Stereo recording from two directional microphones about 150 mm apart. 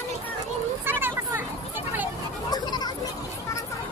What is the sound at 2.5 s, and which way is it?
Children playing, 25° left (ahead or behind).